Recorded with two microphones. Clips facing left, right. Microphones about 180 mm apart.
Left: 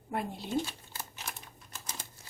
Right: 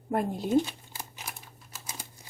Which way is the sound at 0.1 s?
45° right (ahead or behind).